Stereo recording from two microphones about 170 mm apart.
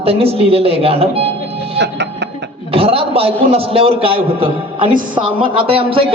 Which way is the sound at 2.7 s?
35° right (ahead or behind).